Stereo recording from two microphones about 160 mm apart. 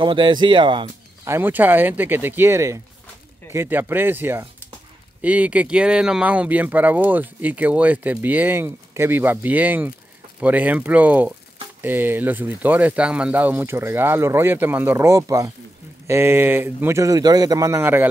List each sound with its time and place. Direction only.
0.0 s speech: 30° right (ahead or behind)
1.2 s speech: 15° right (ahead or behind)